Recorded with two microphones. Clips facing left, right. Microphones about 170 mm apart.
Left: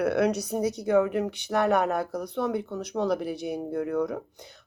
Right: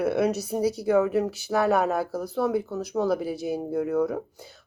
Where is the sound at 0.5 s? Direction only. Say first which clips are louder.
Right 2 dB; 30° right (ahead or behind).